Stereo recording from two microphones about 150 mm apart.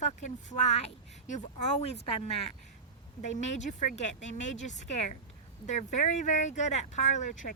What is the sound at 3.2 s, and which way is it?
Speech, 50° left (ahead or behind).